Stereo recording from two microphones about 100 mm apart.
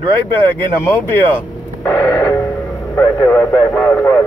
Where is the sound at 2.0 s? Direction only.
35° left (ahead or behind).